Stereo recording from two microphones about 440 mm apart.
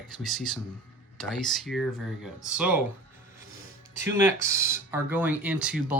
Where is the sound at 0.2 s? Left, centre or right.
Centre.